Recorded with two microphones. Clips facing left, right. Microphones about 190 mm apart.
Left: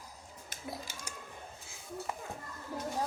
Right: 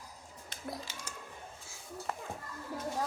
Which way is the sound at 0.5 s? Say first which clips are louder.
Right 1 dB; 10° left (ahead or behind).